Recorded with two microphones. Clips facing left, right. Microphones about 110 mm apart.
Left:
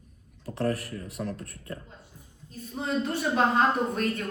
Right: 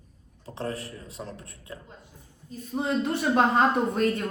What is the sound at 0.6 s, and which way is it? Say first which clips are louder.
A man's voice: left 4 dB; 25° right (ahead or behind).